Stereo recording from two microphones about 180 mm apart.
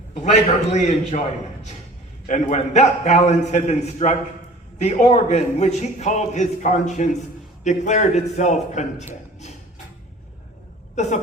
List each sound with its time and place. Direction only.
0.1 s a man's voice: 40° left (ahead or behind)
2.2 s a man's voice: 40° left (ahead or behind)